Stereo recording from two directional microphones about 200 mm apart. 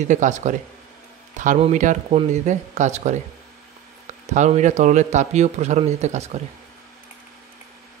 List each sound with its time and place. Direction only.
0.0 s speech: 40° right (ahead or behind)
4.3 s speech: 35° right (ahead or behind)